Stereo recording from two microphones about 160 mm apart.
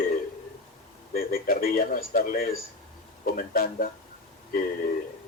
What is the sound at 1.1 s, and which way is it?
Speech, 65° left (ahead or behind).